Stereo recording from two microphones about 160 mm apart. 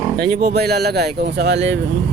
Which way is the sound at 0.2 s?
75° right (ahead or behind).